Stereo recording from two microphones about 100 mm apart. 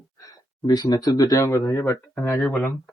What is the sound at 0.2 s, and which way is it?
Speech, 40° left (ahead or behind).